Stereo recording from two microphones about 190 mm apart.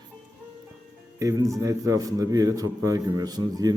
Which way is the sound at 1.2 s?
15° right (ahead or behind).